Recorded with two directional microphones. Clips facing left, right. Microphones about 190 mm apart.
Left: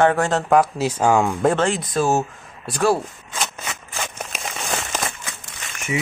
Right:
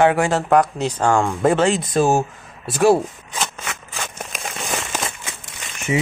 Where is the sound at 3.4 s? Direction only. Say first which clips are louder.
Right 1 dB; centre (ahead or behind).